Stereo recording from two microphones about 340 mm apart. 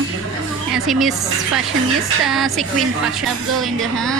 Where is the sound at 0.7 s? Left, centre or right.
Centre.